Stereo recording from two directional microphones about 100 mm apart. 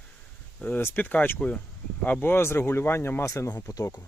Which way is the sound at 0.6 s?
20° left (ahead or behind).